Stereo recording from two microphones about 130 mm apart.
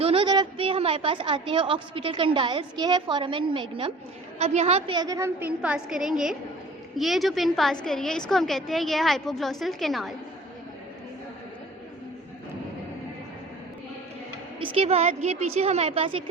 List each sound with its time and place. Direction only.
0.0 s a woman's voice: 45° right (ahead or behind)
4.4 s a woman's voice: 55° right (ahead or behind)
4.9 s a woman's voice: 25° right (ahead or behind); by 10.2 s centre (ahead or behind)
14.6 s a woman's voice: 45° right (ahead or behind)